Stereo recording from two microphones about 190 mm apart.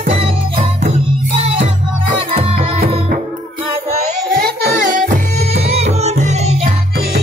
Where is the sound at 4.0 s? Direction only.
55° right (ahead or behind).